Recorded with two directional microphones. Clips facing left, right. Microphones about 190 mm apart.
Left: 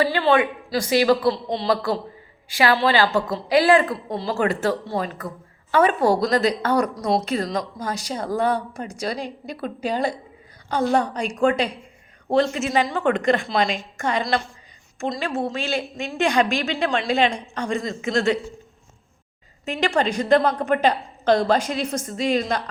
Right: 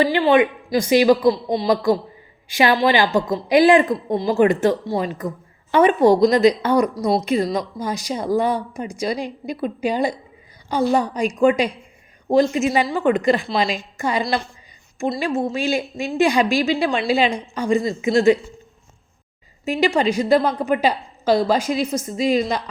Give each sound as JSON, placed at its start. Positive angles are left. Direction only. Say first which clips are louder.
{"t": 0.0, "sound": "speech", "louder": "right 3 dB", "side_deg": -15}
{"t": 19.6, "sound": "speech", "louder": "right 4 dB", "side_deg": -10}